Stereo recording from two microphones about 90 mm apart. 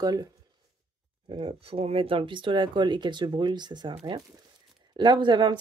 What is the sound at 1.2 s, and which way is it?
Speech, 85° right.